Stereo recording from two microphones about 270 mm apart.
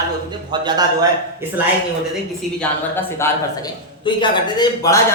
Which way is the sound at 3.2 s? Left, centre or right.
Centre.